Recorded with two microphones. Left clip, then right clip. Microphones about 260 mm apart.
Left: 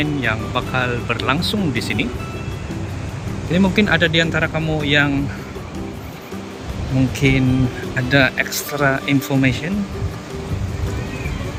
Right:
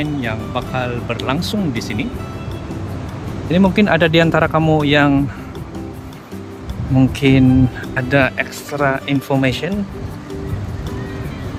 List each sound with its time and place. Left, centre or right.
0.0 s speech: centre
3.5 s speech: centre
7.2 s speech: centre